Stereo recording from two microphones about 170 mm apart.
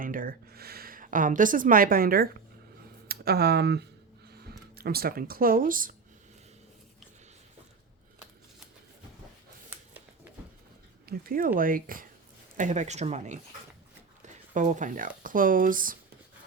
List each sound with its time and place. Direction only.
0.0 s speech: 55° right (ahead or behind); by 3.8 s 75° right (ahead or behind)
4.8 s speech: 65° right (ahead or behind)
11.0 s speech: 55° right (ahead or behind)
12.5 s speech: 45° right (ahead or behind)
14.5 s speech: 45° right (ahead or behind)